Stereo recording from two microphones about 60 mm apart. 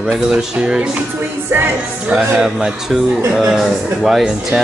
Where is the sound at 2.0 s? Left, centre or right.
Centre.